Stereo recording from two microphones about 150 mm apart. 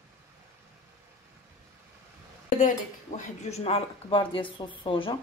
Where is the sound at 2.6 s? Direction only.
55° left (ahead or behind); by 5.2 s 35° left (ahead or behind).